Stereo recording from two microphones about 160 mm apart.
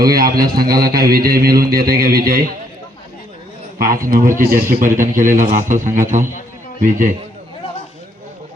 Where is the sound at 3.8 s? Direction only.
60° right (ahead or behind).